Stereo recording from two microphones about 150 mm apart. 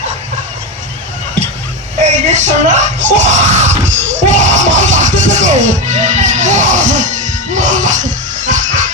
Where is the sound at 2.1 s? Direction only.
50° right (ahead or behind).